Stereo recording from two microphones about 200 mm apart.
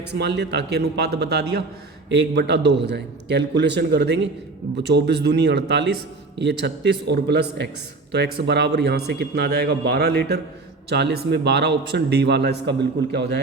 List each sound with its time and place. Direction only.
0.1 s a man's voice: 55° right (ahead or behind)